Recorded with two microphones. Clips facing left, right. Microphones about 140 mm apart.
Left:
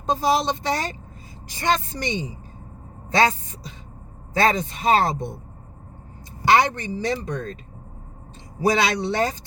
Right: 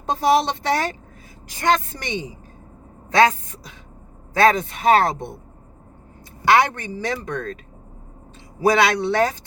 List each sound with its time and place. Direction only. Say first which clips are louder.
0.1 s a woman's voice: right 3 dB; 60° right (ahead or behind)
4.4 s speech: right 4 dB; 55° right (ahead or behind)
6.4 s speech: right 1 dB; 55° right (ahead or behind)
8.6 s speech: right 3 dB; 55° right (ahead or behind)